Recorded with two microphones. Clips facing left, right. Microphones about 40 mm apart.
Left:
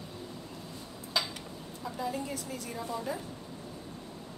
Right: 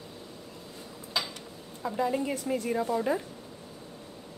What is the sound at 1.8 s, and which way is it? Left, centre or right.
A woman's voice, right.